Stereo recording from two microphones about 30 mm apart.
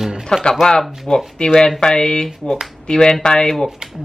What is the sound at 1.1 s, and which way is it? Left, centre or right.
Speech, left.